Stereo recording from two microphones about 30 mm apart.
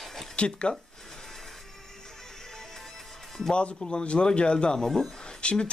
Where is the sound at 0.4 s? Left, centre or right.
Left.